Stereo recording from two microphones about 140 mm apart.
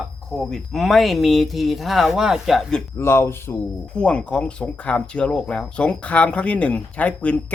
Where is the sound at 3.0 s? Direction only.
20° left (ahead or behind).